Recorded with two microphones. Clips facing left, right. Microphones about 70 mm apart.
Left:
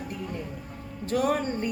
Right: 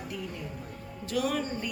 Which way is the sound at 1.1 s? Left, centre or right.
Left.